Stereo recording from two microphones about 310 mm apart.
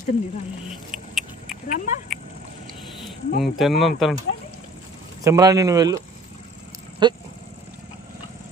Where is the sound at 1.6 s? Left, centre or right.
Left.